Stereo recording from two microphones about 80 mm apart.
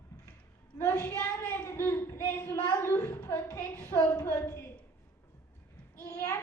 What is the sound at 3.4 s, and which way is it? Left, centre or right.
A woman's voice, left.